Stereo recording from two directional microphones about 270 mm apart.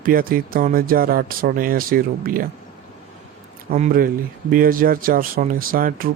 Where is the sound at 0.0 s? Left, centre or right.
Right.